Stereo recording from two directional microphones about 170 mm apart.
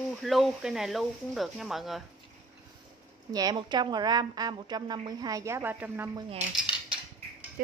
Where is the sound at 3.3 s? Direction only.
20° right (ahead or behind).